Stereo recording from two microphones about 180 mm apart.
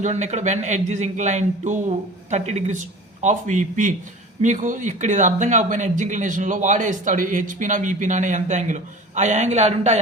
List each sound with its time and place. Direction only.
0.0 s a man's voice: 40° right (ahead or behind)